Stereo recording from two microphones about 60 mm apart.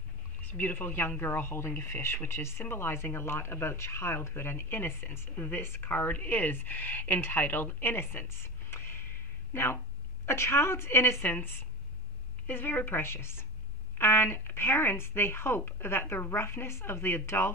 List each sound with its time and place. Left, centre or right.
0.5 s speech: left
11.2 s speech: left